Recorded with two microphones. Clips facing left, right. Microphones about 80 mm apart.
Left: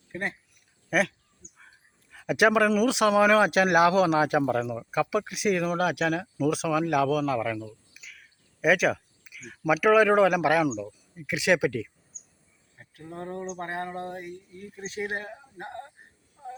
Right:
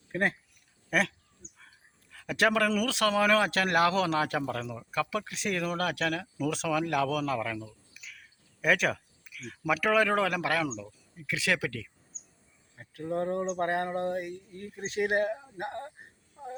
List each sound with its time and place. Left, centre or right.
0.1 s speech: right
0.9 s speech: centre
1.4 s a sound: right
2.1 s speech: centre
12.7 s a sound: right
13.6 s speech: right
13.8 s speech: right
14.2 s speech: right